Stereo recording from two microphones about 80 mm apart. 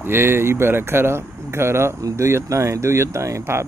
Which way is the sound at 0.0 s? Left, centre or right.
Right.